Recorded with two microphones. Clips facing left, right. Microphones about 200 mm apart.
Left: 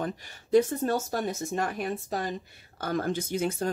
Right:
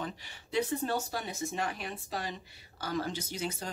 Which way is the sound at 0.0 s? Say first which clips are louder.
Left 6 dB; 45° left (ahead or behind).